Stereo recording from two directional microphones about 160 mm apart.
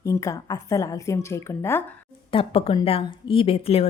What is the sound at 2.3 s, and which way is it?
A woman's voice, 35° left (ahead or behind).